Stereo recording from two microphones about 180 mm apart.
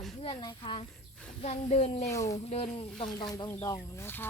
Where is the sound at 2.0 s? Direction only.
15° left (ahead or behind).